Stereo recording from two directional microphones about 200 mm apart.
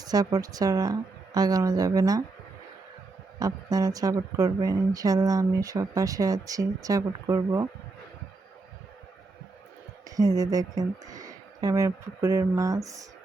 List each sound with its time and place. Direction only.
0.0 s a woman's voice: 20° right (ahead or behind)
3.3 s a woman's voice: 20° right (ahead or behind)
10.2 s a woman's voice: 15° right (ahead or behind)